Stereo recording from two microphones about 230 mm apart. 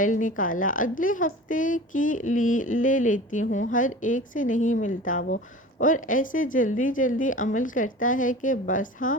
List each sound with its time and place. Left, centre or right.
0.0 s a woman's voice: left